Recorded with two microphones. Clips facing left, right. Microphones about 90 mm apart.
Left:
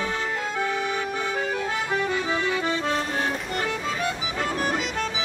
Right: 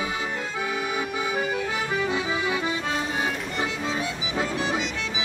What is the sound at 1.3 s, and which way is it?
Accordion, 5° right (ahead or behind).